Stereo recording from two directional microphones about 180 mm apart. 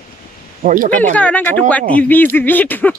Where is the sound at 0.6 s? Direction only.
50° right (ahead or behind).